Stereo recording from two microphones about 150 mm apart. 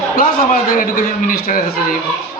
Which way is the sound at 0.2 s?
75° left (ahead or behind).